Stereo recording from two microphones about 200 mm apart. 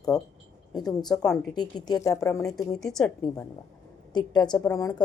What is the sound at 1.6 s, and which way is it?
Speech, 20° left (ahead or behind).